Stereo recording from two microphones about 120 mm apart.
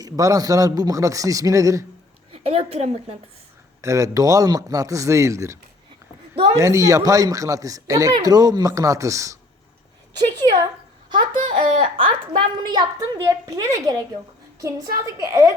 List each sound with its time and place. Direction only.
0.0 s speech: 30° right (ahead or behind)
2.3 s a woman's voice: 55° right (ahead or behind)
3.8 s speech: 25° right (ahead or behind)
6.3 s a sound: 50° right (ahead or behind)
6.6 s speech: 25° right (ahead or behind)
11.3 s baby laughter: 90° right
11.9 s a woman's voice: 45° right (ahead or behind); by 15.5 s 30° right (ahead or behind)